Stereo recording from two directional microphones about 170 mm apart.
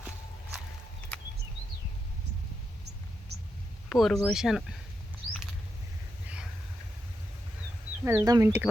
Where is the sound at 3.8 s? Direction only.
Centre (ahead or behind).